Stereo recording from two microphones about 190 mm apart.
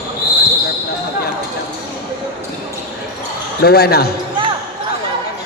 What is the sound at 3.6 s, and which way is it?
Speech, 55° left (ahead or behind).